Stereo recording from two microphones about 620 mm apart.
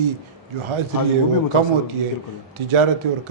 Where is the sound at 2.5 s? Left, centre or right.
Right.